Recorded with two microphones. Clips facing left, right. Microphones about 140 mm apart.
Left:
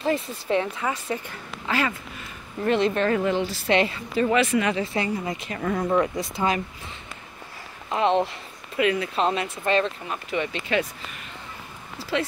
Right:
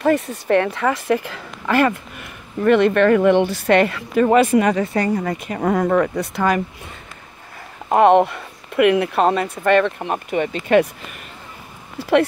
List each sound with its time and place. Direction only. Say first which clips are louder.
0.0 s speech: right 7 dB; 65° right (ahead or behind); by 1.8 s 80° right
1.8 s speech: right 10 dB; 60° right (ahead or behind)
5.7 s speech: right 5 dB; 65° right (ahead or behind)
7.9 s speech: right 9 dB; 55° right (ahead or behind)
12.0 s speech: right 11 dB; 60° right (ahead or behind)